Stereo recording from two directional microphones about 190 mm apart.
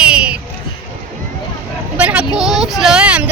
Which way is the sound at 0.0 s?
5° right (ahead or behind).